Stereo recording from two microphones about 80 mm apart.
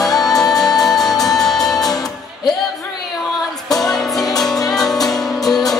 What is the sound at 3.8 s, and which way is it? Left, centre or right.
Music, centre.